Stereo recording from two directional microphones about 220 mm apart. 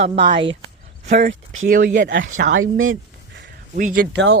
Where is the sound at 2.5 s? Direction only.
65° right (ahead or behind).